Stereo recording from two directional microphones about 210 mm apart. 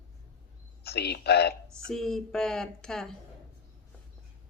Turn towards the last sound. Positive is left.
turn(degrees=0)  # may be behind; listen again after turning